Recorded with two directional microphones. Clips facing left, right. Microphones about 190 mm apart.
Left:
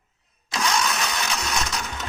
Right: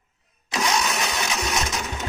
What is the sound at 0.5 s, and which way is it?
Engine, 15° right (ahead or behind).